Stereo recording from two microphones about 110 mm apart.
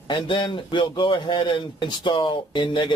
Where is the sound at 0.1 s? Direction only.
50° left (ahead or behind).